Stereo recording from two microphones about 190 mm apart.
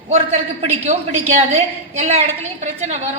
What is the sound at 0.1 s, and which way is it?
A man's voice, 35° right (ahead or behind).